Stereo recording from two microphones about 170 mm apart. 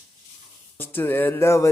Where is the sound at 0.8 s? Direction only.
10° left (ahead or behind).